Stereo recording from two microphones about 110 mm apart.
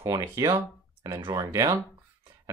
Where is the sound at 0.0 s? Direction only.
30° right (ahead or behind).